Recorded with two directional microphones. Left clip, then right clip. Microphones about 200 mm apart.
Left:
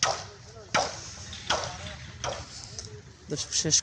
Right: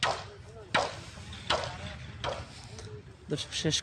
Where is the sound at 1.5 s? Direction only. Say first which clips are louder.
Left 1 dB; 45° left (ahead or behind).